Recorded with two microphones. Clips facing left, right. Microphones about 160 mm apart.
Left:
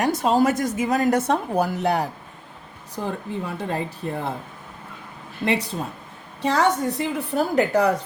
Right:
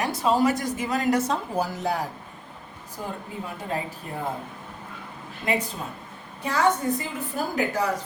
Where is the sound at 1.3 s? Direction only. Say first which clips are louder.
Left 5 dB; 65° left (ahead or behind).